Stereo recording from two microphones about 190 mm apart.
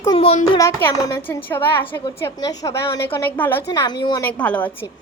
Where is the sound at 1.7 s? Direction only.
25° left (ahead or behind).